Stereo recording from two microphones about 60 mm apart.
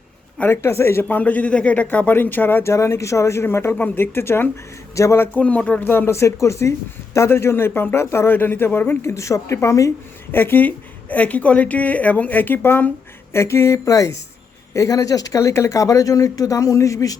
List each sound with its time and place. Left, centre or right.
0.4 s a woman's voice: left
1.0 s a woman's voice: left
2.6 s a woman's voice: left
5.0 s speech: left
5.3 s a woman's voice: left
5.8 s a woman's voice: left
7.3 s a woman's voice: left
8.3 s a woman's voice: left
10.3 s a woman's voice: left
13.3 s speech: left